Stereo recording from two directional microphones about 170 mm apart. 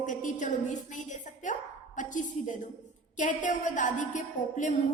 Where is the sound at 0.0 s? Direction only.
50° left (ahead or behind).